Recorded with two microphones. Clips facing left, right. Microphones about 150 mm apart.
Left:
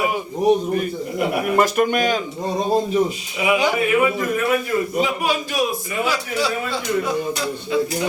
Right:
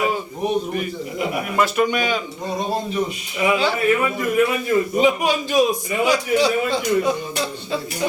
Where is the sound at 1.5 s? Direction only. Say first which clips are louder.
Left 1 dB; 50° left (ahead or behind).